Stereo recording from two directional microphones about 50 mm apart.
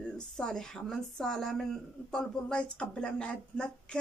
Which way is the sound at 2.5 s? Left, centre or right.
Left.